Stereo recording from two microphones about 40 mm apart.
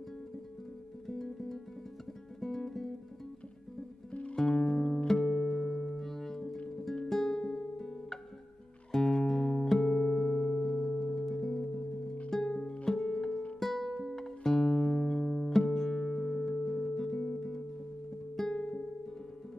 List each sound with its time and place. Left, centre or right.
1.0 s music: centre
4.1 s music: left
4.4 s music: centre
18.5 s music: left